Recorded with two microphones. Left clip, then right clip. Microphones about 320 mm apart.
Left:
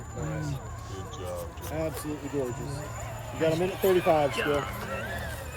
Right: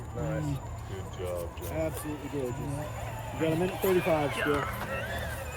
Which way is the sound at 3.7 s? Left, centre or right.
Centre.